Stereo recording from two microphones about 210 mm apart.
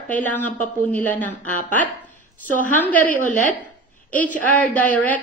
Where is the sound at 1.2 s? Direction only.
40° left (ahead or behind).